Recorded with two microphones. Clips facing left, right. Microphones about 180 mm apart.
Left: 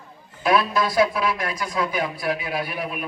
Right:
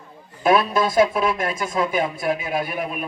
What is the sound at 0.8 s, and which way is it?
Speech, 25° right (ahead or behind).